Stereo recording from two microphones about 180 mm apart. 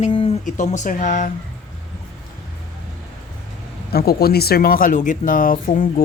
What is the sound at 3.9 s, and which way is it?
Speech, 60° left (ahead or behind).